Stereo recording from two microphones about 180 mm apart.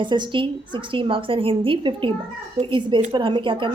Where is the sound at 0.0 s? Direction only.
25° right (ahead or behind).